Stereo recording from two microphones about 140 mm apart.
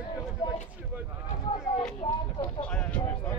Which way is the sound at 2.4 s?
10° left (ahead or behind).